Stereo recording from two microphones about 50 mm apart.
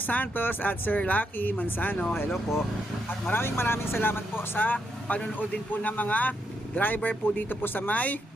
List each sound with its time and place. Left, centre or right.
0.0 s speech: left
3.3 s speech: left